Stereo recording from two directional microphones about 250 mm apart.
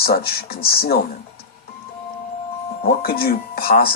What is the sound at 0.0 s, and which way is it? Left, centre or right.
Speech, left.